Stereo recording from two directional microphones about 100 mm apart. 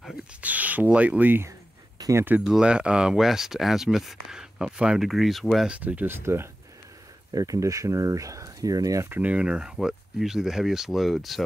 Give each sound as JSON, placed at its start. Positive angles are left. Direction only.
{"t": 0.4, "sound": "speech", "side_deg": -15}
{"t": 2.0, "sound": "a sound", "side_deg": -35}
{"t": 2.4, "sound": "speech", "side_deg": -5}
{"t": 5.7, "sound": "speech", "side_deg": -15}
{"t": 9.1, "sound": "speech", "side_deg": -15}